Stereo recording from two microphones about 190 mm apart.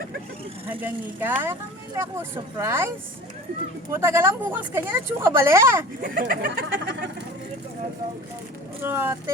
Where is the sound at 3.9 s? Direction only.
15° right (ahead or behind).